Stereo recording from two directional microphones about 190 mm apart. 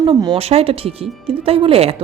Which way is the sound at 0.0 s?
20° right (ahead or behind).